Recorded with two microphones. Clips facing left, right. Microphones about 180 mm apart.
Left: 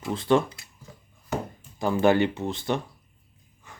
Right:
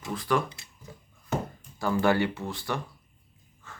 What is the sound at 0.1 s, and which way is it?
Speech, 25° left (ahead or behind).